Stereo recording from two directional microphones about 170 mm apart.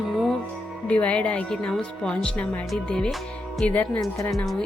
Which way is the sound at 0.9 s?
5° left (ahead or behind).